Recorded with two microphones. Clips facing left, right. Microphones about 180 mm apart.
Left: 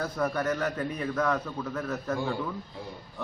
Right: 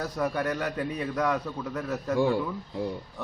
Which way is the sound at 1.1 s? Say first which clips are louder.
Even; 15° right (ahead or behind).